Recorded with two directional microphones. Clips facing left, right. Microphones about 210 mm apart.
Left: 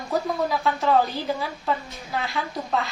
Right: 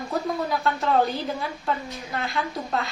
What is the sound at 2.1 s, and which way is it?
Speech, centre (ahead or behind).